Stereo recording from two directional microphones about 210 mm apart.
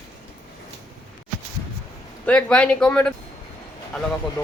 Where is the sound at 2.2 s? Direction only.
5° left (ahead or behind).